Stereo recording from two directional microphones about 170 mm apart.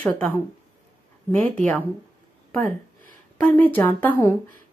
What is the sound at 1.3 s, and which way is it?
Speech, 5° left (ahead or behind).